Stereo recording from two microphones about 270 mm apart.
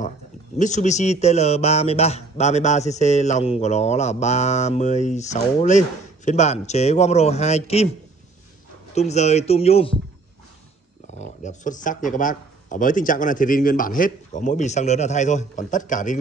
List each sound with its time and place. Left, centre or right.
0.6 s a man's voice: left
8.9 s a man's voice: left
11.1 s a man's voice: left